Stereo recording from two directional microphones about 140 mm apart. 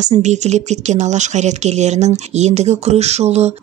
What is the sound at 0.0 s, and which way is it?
Speech, 55° right (ahead or behind).